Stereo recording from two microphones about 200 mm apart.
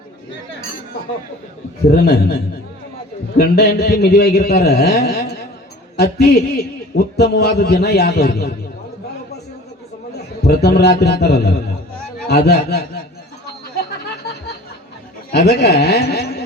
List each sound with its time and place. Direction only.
2.0 s a man's voice: 50° left (ahead or behind)
10.4 s a man's voice: 55° left (ahead or behind)
15.3 s a man's voice: 55° left (ahead or behind)